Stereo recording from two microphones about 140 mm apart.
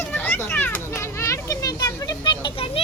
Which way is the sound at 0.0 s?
15° left (ahead or behind).